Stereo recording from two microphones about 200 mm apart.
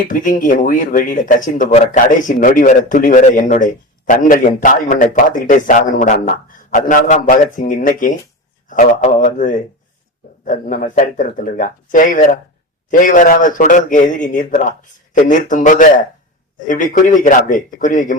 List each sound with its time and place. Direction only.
0.1 s speech: 40° left (ahead or behind)